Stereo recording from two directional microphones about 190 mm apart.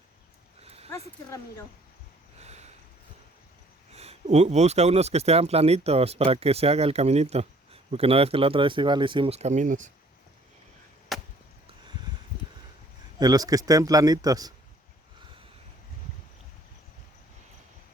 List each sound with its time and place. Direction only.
0.6 s a sound: 30° right (ahead or behind)
0.9 s speech: 15° left (ahead or behind)
2.4 s a sound: 35° right (ahead or behind)
3.9 s speech: 35° right (ahead or behind)
11.1 s chop: centre (ahead or behind)
13.1 s a man's voice: 20° right (ahead or behind)